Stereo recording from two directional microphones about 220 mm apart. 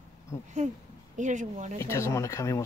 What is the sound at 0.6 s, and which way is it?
Speech, 35° right (ahead or behind).